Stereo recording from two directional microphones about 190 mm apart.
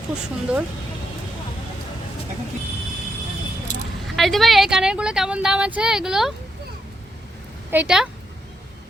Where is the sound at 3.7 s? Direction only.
40° left (ahead or behind).